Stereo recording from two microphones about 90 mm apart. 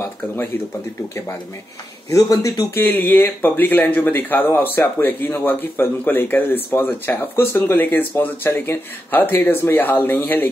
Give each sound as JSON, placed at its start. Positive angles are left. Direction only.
{"t": 2.0, "sound": "speech", "side_deg": 35}
{"t": 2.7, "sound": "speech", "side_deg": 20}